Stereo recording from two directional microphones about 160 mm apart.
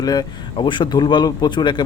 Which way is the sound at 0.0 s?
25° left (ahead or behind).